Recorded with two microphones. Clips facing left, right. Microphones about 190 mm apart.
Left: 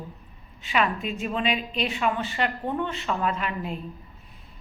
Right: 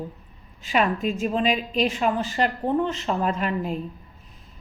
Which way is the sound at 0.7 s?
45° right (ahead or behind).